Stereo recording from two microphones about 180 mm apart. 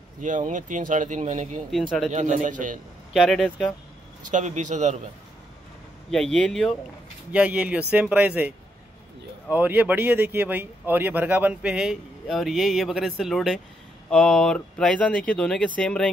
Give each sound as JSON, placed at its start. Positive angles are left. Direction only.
{"t": 0.2, "sound": "speech", "side_deg": -45}
{"t": 1.7, "sound": "speech", "side_deg": 0}
{"t": 2.0, "sound": "speech", "side_deg": -45}
{"t": 3.1, "sound": "speech", "side_deg": 0}
{"t": 4.3, "sound": "speech", "side_deg": -40}
{"t": 6.0, "sound": "speech", "side_deg": 5}
{"t": 7.3, "sound": "speech", "side_deg": -5}